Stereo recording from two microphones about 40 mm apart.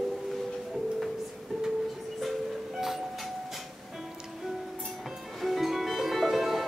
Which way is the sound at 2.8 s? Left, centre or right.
Centre.